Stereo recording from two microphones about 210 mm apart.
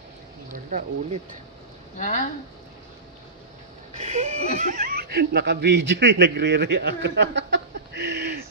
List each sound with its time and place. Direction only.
0.5 s speech: 40° right (ahead or behind)
4.0 s speech: 30° right (ahead or behind); by 8.5 s 55° right (ahead or behind)